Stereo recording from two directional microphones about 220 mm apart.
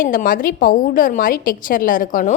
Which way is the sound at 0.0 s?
40° left (ahead or behind).